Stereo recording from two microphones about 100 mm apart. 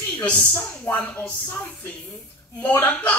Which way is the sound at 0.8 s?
20° left (ahead or behind).